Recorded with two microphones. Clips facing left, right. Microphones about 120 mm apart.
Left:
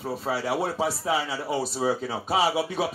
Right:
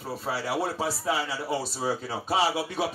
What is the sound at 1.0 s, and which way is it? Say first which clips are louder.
A man's voice: left 2 dB; 20° left (ahead or behind).